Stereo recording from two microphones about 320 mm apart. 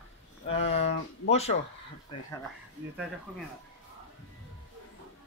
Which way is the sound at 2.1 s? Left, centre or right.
Centre.